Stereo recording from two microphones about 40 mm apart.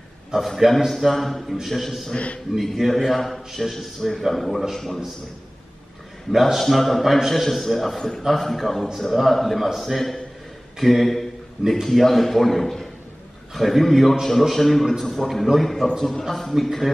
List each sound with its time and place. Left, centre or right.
0.3 s a man's voice: centre
2.1 s a man's voice: left
2.7 s a man's voice: centre
6.3 s a man's voice: centre